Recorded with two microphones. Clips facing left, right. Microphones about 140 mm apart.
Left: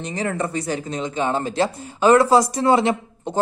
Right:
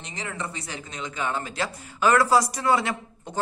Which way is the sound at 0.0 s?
45° left (ahead or behind).